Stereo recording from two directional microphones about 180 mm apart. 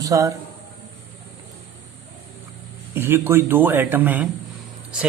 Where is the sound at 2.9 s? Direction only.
15° right (ahead or behind).